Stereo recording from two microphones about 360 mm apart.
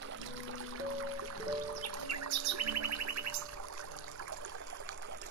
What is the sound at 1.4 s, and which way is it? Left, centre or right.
Music, right.